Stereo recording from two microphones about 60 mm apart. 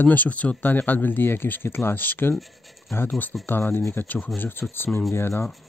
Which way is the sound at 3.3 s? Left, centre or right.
Centre.